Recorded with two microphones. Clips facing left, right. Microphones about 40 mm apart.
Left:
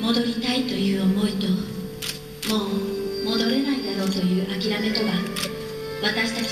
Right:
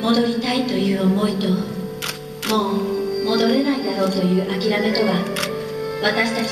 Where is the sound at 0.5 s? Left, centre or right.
Centre.